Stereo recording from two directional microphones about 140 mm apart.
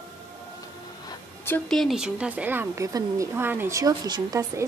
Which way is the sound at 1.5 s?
10° left (ahead or behind).